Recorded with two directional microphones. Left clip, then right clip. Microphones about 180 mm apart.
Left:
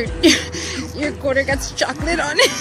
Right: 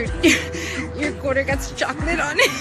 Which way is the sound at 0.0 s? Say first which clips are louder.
Left 2 dB; 15° left (ahead or behind).